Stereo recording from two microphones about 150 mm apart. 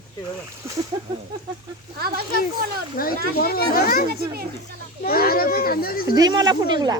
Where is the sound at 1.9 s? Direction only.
90° right.